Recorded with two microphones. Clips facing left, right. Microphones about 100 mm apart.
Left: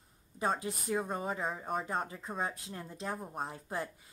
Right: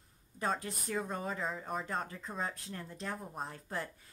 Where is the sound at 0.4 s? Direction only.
10° left (ahead or behind).